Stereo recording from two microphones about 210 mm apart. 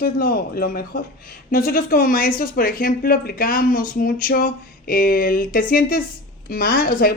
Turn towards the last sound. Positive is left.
turn(degrees=45)  # may be behind; listen again after turning